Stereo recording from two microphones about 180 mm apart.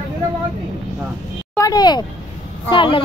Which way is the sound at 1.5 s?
20° left (ahead or behind).